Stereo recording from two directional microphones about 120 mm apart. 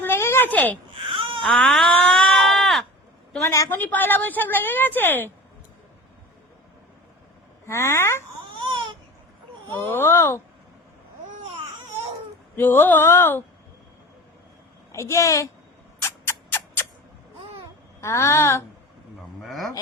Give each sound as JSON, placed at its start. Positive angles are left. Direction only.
{"t": 0.0, "sound": "a sound", "side_deg": 20}
{"t": 1.1, "sound": "baby cry", "side_deg": -45}
{"t": 1.4, "sound": "a sound", "side_deg": 10}
{"t": 3.4, "sound": "a woman's voice", "side_deg": 25}
{"t": 7.7, "sound": "speech", "side_deg": 20}
{"t": 8.5, "sound": "baby cry", "side_deg": -45}
{"t": 9.7, "sound": "speech", "side_deg": 20}
{"t": 12.5, "sound": "a woman's voice", "side_deg": 15}
{"t": 14.9, "sound": "speech", "side_deg": 25}
{"t": 16.0, "sound": "a sound", "side_deg": 20}
{"t": 18.0, "sound": "speech", "side_deg": 25}
{"t": 19.4, "sound": "speech", "side_deg": 0}